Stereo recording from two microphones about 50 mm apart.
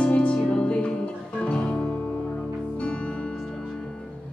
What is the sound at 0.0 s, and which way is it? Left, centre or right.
Music, left.